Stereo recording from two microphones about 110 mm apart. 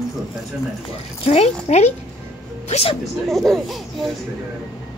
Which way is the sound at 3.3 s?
5° left (ahead or behind).